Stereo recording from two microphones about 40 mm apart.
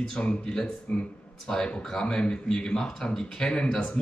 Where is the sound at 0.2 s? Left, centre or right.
Left.